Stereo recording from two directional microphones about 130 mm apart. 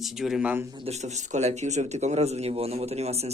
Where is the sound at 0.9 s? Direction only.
60° right (ahead or behind).